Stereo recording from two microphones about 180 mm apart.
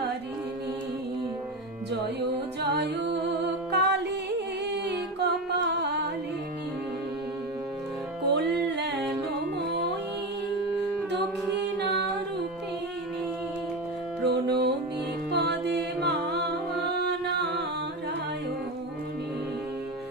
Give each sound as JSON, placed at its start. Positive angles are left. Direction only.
{"t": 2.6, "sound": "music", "side_deg": -65}
{"t": 8.3, "sound": "music", "side_deg": -70}
{"t": 14.3, "sound": "music", "side_deg": -65}